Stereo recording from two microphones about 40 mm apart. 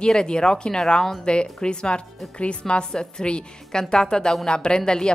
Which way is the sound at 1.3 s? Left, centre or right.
Left.